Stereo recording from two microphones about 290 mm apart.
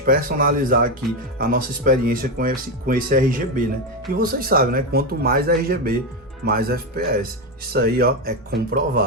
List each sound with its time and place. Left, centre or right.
0.0 s speech: right